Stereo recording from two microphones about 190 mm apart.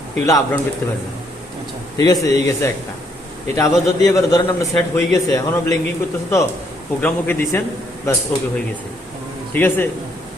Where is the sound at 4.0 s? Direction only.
20° left (ahead or behind).